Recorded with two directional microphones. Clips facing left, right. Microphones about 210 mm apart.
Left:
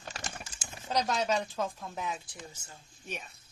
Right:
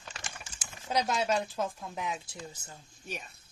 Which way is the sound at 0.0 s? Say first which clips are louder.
Left 4 dB; 40° left (ahead or behind).